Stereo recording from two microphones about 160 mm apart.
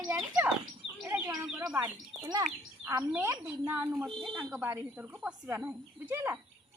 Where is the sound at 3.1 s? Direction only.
15° right (ahead or behind).